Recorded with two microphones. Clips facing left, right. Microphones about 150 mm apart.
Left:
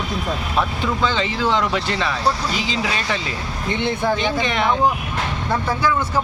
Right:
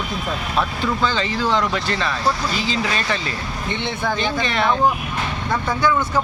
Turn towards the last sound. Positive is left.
turn(degrees=5)  # may be behind; listen again after turning